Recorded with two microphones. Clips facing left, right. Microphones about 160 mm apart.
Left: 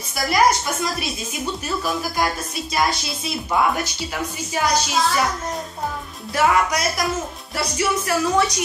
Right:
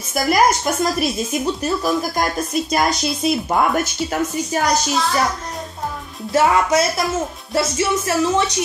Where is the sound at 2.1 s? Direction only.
50° right (ahead or behind).